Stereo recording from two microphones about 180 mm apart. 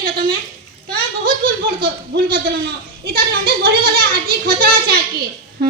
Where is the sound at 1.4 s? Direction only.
55° right (ahead or behind).